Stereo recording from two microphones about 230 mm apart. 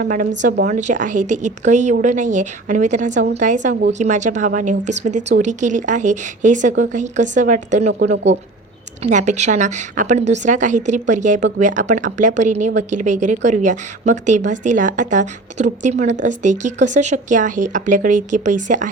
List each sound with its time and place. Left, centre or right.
0.0 s speech: right
8.1 s speech: right
9.0 s speech: right